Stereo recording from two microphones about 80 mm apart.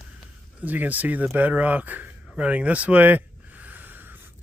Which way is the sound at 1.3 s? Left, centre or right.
Right.